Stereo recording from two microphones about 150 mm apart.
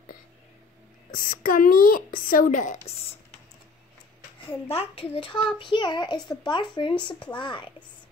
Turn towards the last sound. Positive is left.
turn(degrees=30)  # may be behind; listen again after turning